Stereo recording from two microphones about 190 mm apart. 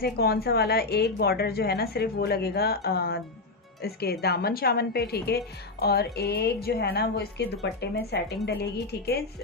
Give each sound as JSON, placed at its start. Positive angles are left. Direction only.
{"t": 0.0, "sound": "a woman's voice", "side_deg": 55}